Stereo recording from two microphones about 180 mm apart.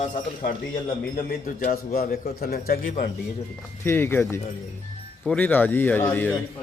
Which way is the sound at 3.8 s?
15° left (ahead or behind).